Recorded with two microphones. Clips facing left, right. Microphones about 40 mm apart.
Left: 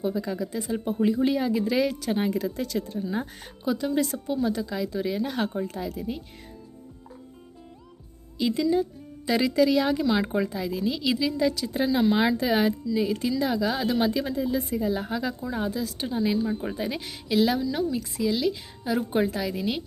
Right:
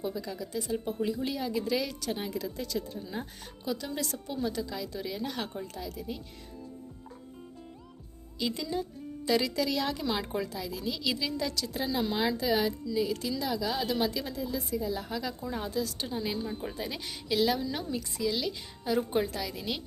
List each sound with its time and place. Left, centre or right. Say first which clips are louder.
0.0 s speech: left 7 dB; left
2.1 s speech: left 8 dB; left
3.6 s speech: left 9 dB; left
5.5 s a woman's voice: left 8 dB; left
8.4 s a woman's voice: left 9 dB; centre
10.3 s speech: left 7 dB; left
12.4 s a woman's voice: left 5 dB; left
12.9 s a woman's voice: left 5 dB; left
15.4 s a woman's voice: left 4 dB; centre